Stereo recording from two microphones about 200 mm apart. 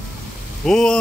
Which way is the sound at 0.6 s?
5° left (ahead or behind).